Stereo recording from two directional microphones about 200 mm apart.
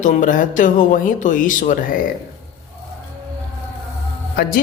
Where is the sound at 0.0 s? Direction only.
40° left (ahead or behind).